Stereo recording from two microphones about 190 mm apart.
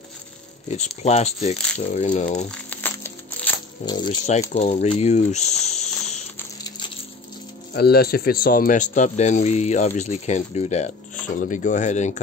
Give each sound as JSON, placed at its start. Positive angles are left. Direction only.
{"t": 1.0, "sound": "speech", "side_deg": 35}
{"t": 2.7, "sound": "a sound", "side_deg": 10}
{"t": 3.8, "sound": "speech", "side_deg": 25}
{"t": 4.5, "sound": "speech", "side_deg": 40}
{"t": 6.3, "sound": "a sound", "side_deg": 20}
{"t": 7.7, "sound": "speech", "side_deg": 55}